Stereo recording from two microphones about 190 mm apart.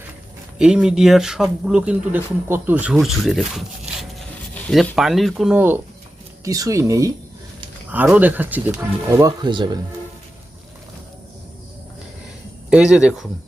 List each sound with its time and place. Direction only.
0.6 s speech: 5° right (ahead or behind); by 9.6 s 25° right (ahead or behind)
12.7 s speech: 5° right (ahead or behind)